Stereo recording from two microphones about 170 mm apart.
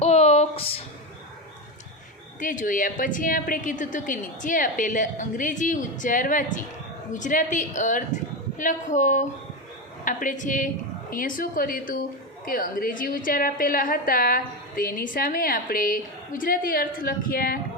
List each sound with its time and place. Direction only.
0.0 s music: 40° left (ahead or behind)
2.4 s a woman's voice: 50° left (ahead or behind)